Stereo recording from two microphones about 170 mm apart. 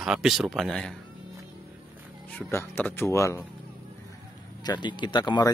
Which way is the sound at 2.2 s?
10° left (ahead or behind).